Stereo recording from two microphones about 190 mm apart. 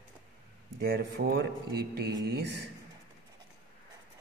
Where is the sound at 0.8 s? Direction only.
55° right (ahead or behind).